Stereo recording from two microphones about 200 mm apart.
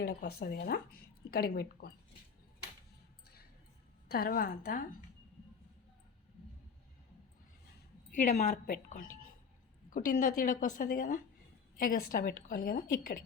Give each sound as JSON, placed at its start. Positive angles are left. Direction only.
{"t": 0.0, "sound": "speech", "side_deg": 50}
{"t": 4.1, "sound": "speech", "side_deg": 50}
{"t": 8.1, "sound": "a woman's voice", "side_deg": 35}